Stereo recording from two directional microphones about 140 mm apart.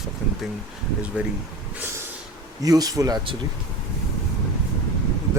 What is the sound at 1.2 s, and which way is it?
Speech, 10° right (ahead or behind).